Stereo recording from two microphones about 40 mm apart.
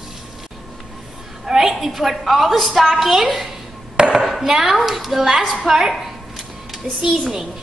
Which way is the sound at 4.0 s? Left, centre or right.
Centre.